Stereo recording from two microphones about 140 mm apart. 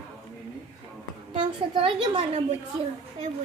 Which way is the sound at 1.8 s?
40° right (ahead or behind).